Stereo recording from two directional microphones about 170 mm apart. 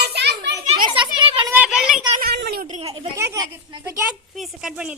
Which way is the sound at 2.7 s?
35° right (ahead or behind).